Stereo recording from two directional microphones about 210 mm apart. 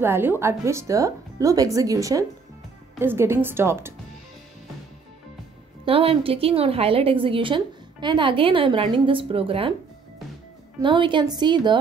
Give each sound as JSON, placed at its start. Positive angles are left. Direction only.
{"t": 0.0, "sound": "speech", "side_deg": -10}
{"t": 5.9, "sound": "a woman's voice", "side_deg": -25}
{"t": 10.8, "sound": "a woman's voice", "side_deg": -20}